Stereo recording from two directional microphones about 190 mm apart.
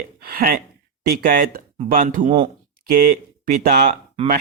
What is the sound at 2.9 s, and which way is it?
Speech, 50° right (ahead or behind).